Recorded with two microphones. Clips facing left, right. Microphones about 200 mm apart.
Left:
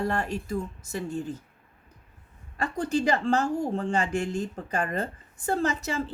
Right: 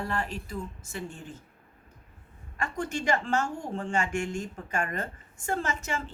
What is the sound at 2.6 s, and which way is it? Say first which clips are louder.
A woman's voice: left 6 dB; 35° left (ahead or behind).